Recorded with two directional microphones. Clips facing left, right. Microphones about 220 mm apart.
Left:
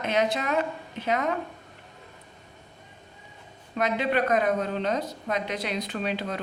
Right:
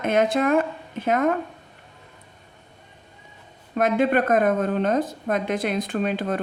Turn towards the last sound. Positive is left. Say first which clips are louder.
# right 6 dB
turn(degrees=-50)  # may be behind; listen again after turning